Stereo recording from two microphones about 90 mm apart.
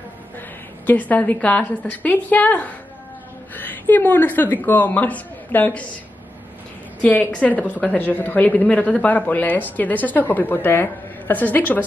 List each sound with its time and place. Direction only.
0.8 s a woman's voice: 20° left (ahead or behind)
7.0 s a woman's voice: 15° left (ahead or behind)